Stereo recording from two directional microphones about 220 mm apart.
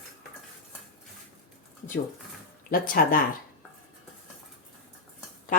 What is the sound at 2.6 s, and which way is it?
Speech, 40° left (ahead or behind).